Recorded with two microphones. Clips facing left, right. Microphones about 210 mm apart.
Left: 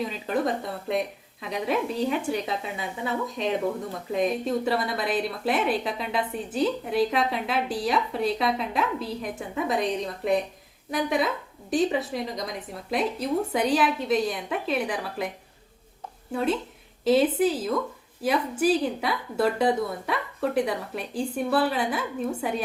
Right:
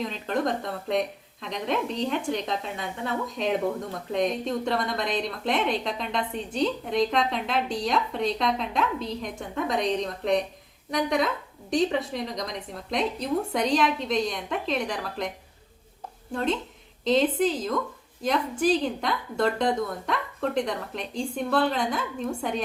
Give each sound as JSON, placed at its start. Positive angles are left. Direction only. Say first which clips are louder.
{"t": 0.0, "sound": "a woman's voice", "louder": "left 1 dB", "side_deg": 5}
{"t": 16.3, "sound": "a woman's voice", "louder": "left 1 dB", "side_deg": 5}